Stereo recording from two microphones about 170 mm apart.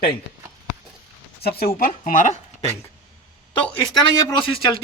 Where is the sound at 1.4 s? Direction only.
65° left (ahead or behind); by 2.3 s 50° left (ahead or behind).